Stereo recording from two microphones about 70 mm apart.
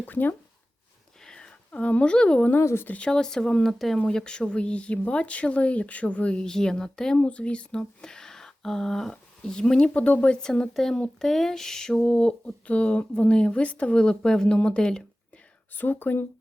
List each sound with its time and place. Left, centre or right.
0.0 s speech: left
1.2 s a sound: centre
2.5 s speech: left
2.9 s speech: centre
15.7 s speech: left